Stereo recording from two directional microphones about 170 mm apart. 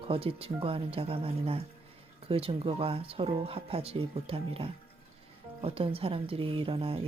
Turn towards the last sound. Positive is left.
turn(degrees=-35)  # may be behind; listen again after turning